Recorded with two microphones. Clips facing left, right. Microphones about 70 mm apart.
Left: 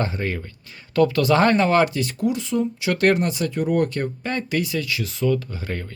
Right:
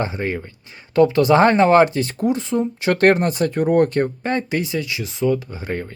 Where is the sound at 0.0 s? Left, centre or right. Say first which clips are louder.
Right 2 dB; right.